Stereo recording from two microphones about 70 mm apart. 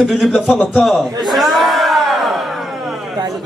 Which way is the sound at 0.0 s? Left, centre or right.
Centre.